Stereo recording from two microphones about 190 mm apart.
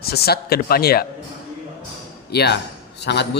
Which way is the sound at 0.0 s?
55° left (ahead or behind).